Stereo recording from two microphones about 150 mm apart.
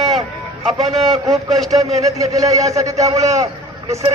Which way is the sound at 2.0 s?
20° right (ahead or behind).